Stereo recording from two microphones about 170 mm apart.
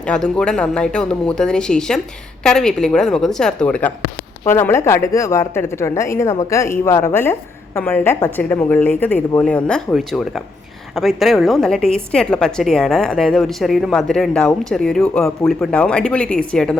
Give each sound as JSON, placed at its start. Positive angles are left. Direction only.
{"t": 0.0, "sound": "a woman's voice", "side_deg": 5}